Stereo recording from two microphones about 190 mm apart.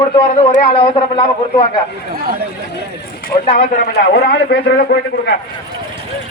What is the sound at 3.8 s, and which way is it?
A man's voice, 55° left (ahead or behind).